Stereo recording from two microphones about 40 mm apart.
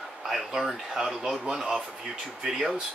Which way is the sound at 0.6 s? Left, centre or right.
Centre.